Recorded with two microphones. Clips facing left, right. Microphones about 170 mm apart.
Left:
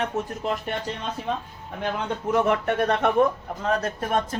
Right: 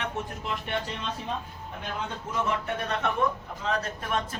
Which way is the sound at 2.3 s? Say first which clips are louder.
Left 8 dB; 65° left (ahead or behind).